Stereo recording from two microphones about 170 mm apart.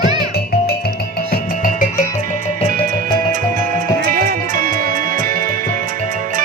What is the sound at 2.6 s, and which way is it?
Music, 55° right (ahead or behind).